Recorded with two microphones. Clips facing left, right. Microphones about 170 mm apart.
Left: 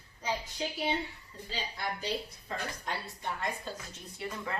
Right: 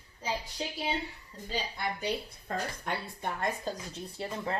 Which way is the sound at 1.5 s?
55° right (ahead or behind).